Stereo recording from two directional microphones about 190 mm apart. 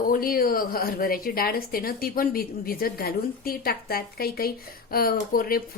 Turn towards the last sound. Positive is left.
turn(degrees=50)  # may be behind; listen again after turning